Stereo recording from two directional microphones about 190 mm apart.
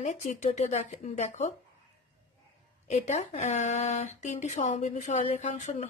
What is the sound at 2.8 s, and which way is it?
A woman's voice, 35° left (ahead or behind).